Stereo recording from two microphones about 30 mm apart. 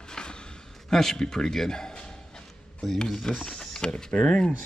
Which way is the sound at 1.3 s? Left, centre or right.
Centre.